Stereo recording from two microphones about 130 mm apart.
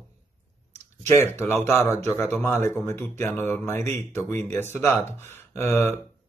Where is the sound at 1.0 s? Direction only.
20° left (ahead or behind).